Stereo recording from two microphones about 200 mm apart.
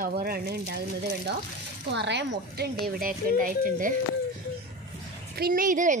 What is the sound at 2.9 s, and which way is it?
A woman's voice, 45° right (ahead or behind).